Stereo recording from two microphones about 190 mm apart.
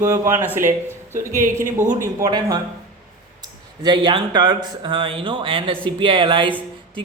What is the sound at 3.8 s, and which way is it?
Speech, 25° right (ahead or behind).